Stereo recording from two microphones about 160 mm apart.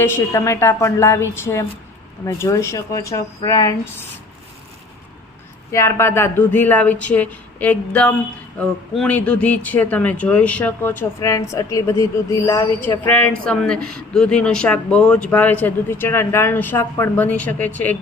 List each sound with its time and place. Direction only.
0.0 s speech: 15° left (ahead or behind)
5.7 s speech: 20° left (ahead or behind)
13.1 s speech: 10° left (ahead or behind)